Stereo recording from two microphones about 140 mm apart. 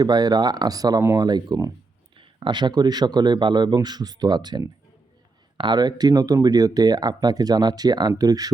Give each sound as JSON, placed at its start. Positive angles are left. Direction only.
{"t": 0.0, "sound": "a man's voice", "side_deg": -30}